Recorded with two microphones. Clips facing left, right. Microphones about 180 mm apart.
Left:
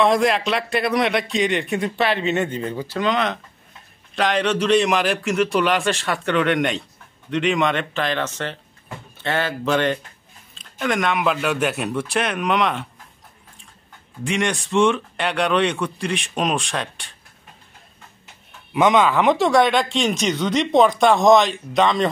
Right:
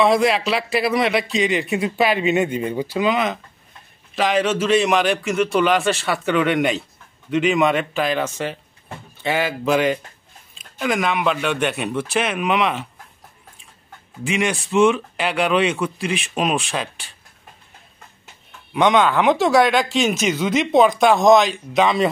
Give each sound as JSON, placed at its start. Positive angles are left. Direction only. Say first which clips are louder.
{"t": 0.0, "sound": "speech", "louder": "right 1 dB", "side_deg": 0}
{"t": 14.2, "sound": "speech", "louder": "right 1 dB", "side_deg": -5}
{"t": 18.7, "sound": "speech", "louder": "even", "side_deg": 0}